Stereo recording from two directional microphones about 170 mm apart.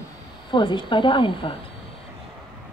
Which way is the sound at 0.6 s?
25° left (ahead or behind).